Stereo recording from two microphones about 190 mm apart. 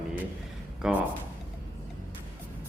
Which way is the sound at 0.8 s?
10° right (ahead or behind).